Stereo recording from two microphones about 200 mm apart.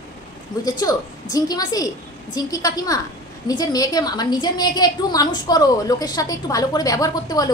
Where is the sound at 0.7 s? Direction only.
20° left (ahead or behind).